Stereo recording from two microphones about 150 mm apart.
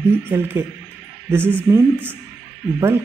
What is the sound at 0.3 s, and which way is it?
Speech, 15° right (ahead or behind).